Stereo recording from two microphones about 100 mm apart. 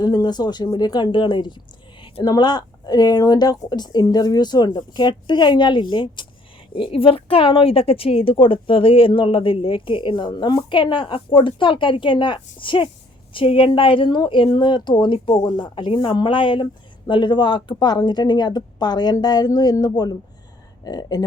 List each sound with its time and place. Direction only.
0.0 s a woman's voice: 40° left (ahead or behind)